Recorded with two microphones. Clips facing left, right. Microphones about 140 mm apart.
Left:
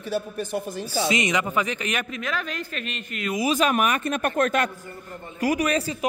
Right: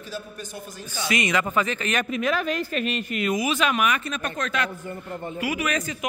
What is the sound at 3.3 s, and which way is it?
A man's voice, 40° left (ahead or behind).